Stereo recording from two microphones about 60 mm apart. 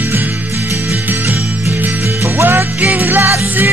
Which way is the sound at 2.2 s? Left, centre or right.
Right.